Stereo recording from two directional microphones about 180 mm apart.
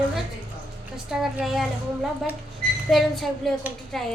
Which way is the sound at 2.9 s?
Centre (ahead or behind).